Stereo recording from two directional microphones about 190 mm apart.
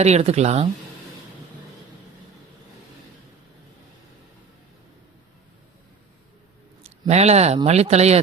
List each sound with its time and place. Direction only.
0.0 s speech: 35° right (ahead or behind)
7.1 s speech: 35° right (ahead or behind)